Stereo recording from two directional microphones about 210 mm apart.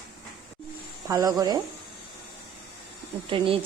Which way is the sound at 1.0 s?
15° right (ahead or behind).